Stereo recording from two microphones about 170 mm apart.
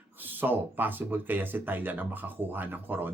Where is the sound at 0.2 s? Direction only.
10° right (ahead or behind).